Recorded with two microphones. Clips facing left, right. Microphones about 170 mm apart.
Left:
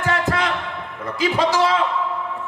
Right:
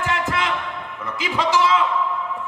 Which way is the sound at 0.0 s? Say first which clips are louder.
Left 2 dB; 40° left (ahead or behind).